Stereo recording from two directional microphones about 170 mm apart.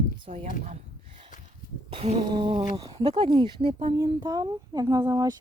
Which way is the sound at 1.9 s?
40° right (ahead or behind).